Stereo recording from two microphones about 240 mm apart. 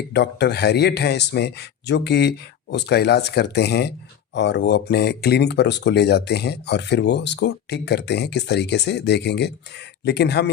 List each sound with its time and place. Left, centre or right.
0.1 s speech: left